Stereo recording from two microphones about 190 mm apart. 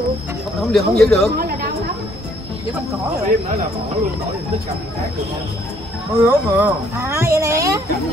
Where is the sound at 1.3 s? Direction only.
50° right (ahead or behind).